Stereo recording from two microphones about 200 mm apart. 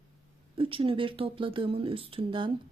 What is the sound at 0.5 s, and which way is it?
Speech, 25° right (ahead or behind).